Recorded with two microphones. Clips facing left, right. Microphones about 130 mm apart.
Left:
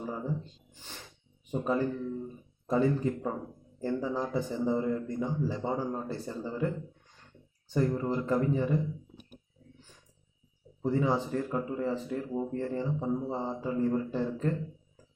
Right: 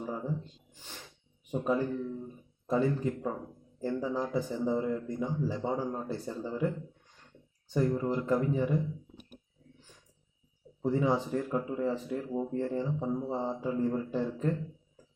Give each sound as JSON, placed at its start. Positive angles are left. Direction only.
{"t": 1.5, "sound": "speech", "side_deg": -5}
{"t": 7.8, "sound": "speech", "side_deg": -10}
{"t": 10.8, "sound": "speech", "side_deg": -15}
{"t": 12.5, "sound": "speech", "side_deg": -15}
{"t": 12.8, "sound": "speech", "side_deg": -5}